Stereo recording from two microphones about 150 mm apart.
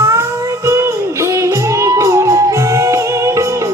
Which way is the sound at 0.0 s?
20° right (ahead or behind).